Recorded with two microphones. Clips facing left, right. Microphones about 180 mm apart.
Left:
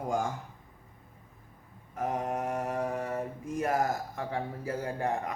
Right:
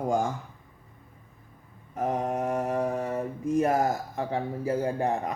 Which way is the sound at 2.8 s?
25° right (ahead or behind).